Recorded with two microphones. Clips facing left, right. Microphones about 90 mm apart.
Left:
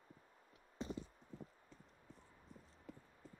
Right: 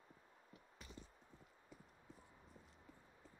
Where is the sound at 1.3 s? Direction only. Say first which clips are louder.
Left 14 dB; 90° left.